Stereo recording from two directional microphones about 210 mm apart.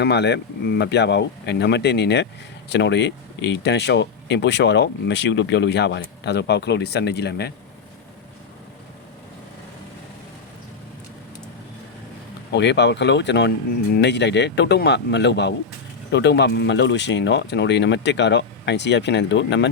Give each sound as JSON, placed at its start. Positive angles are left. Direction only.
{"t": 0.0, "sound": "speech", "side_deg": 55}
{"t": 12.5, "sound": "speech", "side_deg": 55}